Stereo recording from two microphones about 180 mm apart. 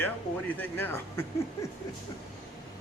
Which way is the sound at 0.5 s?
10° left (ahead or behind).